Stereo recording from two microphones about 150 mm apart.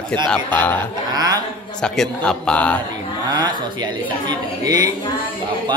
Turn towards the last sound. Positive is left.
turn(degrees=-25)  # may be behind; listen again after turning